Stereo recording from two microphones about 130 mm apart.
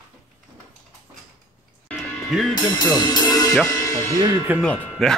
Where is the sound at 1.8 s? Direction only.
Centre (ahead or behind).